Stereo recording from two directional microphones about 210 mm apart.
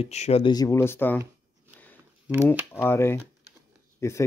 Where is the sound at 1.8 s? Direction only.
10° left (ahead or behind).